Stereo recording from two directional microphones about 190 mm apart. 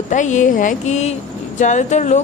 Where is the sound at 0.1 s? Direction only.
40° left (ahead or behind).